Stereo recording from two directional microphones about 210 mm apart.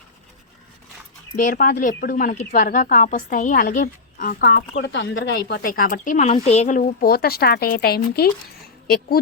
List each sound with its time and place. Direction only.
1.4 s a woman's voice: 45° left (ahead or behind)